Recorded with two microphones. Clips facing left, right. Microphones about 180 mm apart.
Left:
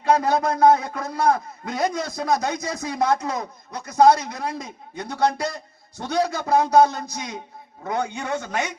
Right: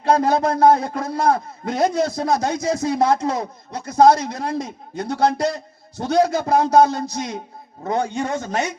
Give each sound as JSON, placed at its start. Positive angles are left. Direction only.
{"t": 0.0, "sound": "a man's voice", "side_deg": -40}